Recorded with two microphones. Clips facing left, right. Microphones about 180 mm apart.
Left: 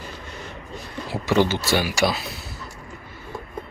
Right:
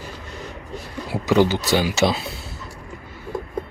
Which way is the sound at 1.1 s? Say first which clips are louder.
Right 3 dB; 15° right (ahead or behind).